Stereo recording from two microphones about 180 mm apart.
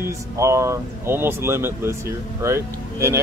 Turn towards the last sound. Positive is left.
turn(degrees=-15)  # may be behind; listen again after turning